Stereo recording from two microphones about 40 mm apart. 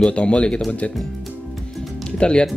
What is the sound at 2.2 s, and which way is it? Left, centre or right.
Speech, left.